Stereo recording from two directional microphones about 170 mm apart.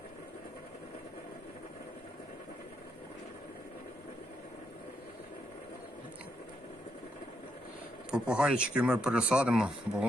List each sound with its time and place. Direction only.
8.1 s speech: 5° right (ahead or behind)